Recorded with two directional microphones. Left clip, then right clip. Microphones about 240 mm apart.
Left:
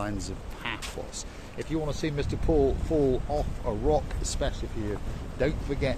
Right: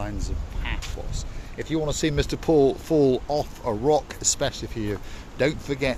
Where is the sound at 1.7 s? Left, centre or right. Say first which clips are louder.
Right 6 dB; right.